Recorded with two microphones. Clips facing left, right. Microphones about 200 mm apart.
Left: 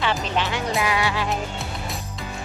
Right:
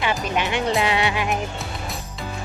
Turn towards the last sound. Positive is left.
turn(degrees=-15)  # may be behind; listen again after turning